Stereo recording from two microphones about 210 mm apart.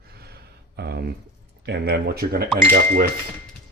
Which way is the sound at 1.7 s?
50° right (ahead or behind).